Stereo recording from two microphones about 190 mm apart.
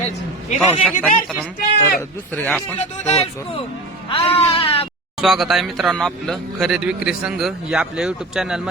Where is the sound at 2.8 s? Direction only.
35° left (ahead or behind).